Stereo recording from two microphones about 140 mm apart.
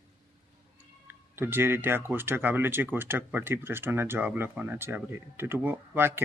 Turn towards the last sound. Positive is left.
turn(degrees=-15)  # may be behind; listen again after turning